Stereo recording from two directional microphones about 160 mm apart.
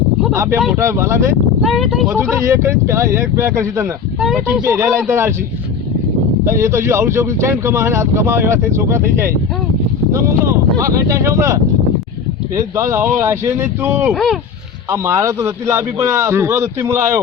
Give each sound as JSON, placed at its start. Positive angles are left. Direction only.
{"t": 0.8, "sound": "speech", "side_deg": -15}
{"t": 1.6, "sound": "speech", "side_deg": 0}
{"t": 2.3, "sound": "speech", "side_deg": -15}
{"t": 6.4, "sound": "a man's voice", "side_deg": -15}
{"t": 12.7, "sound": "speech", "side_deg": -20}
{"t": 14.1, "sound": "speech", "side_deg": 0}
{"t": 14.8, "sound": "a man's voice", "side_deg": -15}